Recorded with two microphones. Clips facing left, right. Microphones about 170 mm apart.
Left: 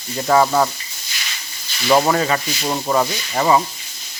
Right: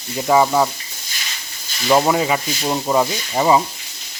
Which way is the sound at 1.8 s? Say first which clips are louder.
Even; 5° right (ahead or behind).